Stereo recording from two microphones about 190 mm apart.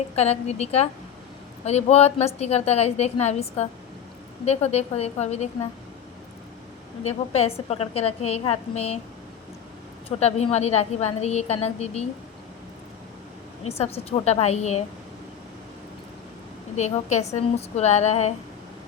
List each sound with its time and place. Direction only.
0.2 s a woman's voice: 35° left (ahead or behind)
7.0 s a woman's voice: 35° left (ahead or behind)
10.2 s a woman's voice: 35° left (ahead or behind)
13.7 s a woman's voice: 35° left (ahead or behind)
16.7 s a woman's voice: 35° left (ahead or behind)